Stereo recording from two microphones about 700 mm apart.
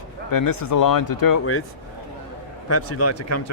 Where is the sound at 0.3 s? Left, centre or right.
Left.